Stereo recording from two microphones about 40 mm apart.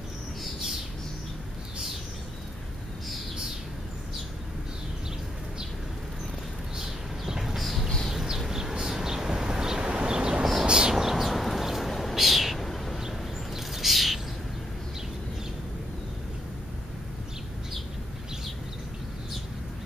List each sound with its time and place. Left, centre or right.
6.8 s a sound: centre
8.1 s vehicle: centre
10.6 s bird: centre
11.9 s owl: centre
13.6 s bird: centre